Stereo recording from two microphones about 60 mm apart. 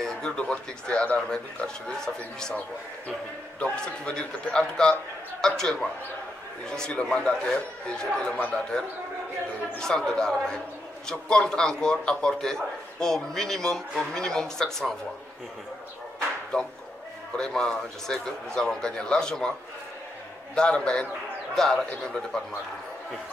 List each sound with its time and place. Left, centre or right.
0.0 s a man's voice: centre
3.7 s a man's voice: centre
16.5 s a man's voice: centre
20.5 s a man's voice: centre